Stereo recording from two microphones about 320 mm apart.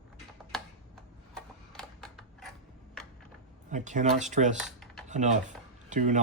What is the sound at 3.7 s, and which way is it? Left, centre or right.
Speech, right.